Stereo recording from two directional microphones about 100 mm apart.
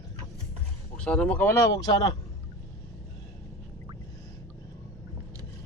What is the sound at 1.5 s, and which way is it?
Speech, 35° left (ahead or behind).